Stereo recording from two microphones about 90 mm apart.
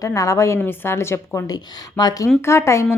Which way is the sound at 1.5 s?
45° left (ahead or behind).